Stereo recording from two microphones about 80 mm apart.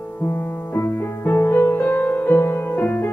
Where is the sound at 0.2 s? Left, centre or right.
Left.